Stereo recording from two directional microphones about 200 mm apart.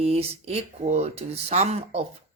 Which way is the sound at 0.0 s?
30° right (ahead or behind).